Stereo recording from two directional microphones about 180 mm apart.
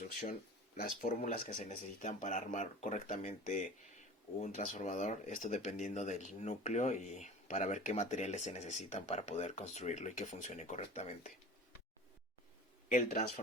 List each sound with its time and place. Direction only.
0.0 s speech: 55° left (ahead or behind)
12.9 s speech: 45° left (ahead or behind)